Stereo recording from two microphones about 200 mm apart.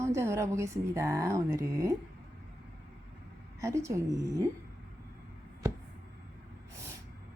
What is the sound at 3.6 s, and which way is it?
Speech, 15° right (ahead or behind).